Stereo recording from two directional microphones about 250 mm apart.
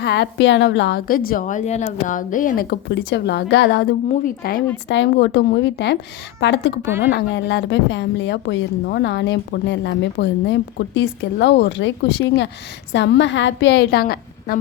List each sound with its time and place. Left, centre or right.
0.0 s a woman's voice: left